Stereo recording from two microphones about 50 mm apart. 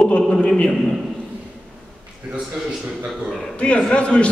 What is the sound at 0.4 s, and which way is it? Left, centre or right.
Speech, centre.